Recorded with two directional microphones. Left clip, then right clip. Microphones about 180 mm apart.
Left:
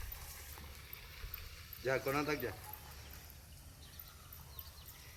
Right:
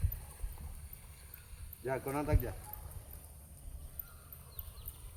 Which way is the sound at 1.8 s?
65° right (ahead or behind).